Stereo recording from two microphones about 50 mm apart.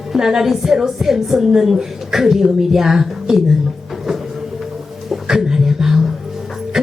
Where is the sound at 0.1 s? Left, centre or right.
Centre.